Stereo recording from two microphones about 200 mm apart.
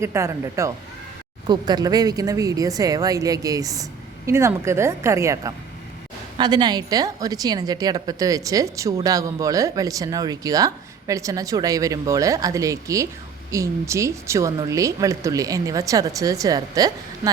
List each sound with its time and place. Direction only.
0.0 s a woman's voice: 15° right (ahead or behind)